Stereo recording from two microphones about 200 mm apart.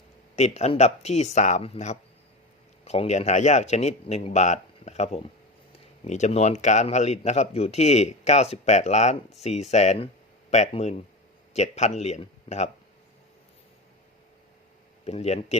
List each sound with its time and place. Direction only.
0.3 s speech: 35° left (ahead or behind)
15.0 s speech: 35° left (ahead or behind)